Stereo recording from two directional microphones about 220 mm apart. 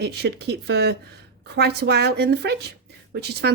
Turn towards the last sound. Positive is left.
turn(degrees=-50)  # may be behind; listen again after turning